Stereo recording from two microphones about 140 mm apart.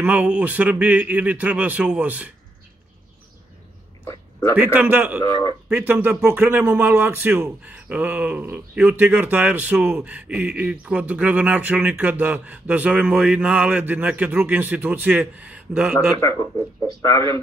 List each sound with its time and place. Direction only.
0.0 s a man's voice: 10° right (ahead or behind)
4.6 s a man's voice: 10° right (ahead or behind)
16.8 s a man's voice: 25° left (ahead or behind)